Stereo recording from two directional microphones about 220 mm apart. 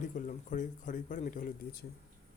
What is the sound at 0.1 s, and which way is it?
Speech, 35° left (ahead or behind).